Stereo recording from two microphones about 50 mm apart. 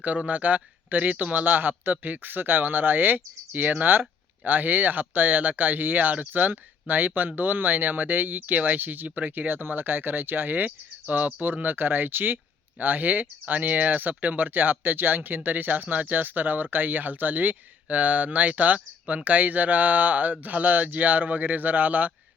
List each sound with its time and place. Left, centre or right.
0.0 s speech: right